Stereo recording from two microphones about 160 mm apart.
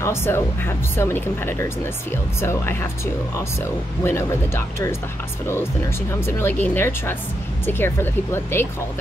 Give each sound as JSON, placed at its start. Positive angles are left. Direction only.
{"t": 0.0, "sound": "speech", "side_deg": 15}
{"t": 4.0, "sound": "speech", "side_deg": 15}
{"t": 6.2, "sound": "speech", "side_deg": 15}